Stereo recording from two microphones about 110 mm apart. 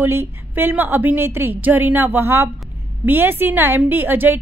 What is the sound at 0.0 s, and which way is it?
A woman's voice, 20° right (ahead or behind).